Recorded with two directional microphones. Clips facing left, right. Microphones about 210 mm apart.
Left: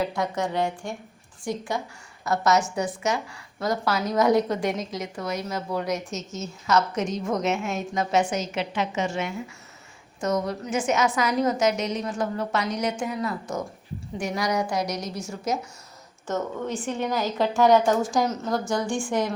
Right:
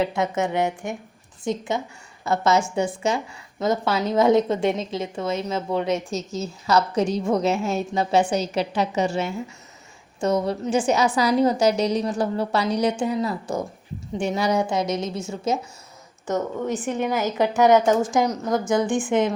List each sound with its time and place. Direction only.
0.0 s a woman's voice: 25° right (ahead or behind)